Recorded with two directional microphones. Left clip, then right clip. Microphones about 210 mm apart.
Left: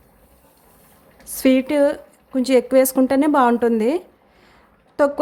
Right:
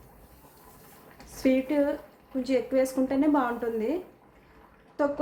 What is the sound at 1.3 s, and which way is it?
Speech, 45° left (ahead or behind).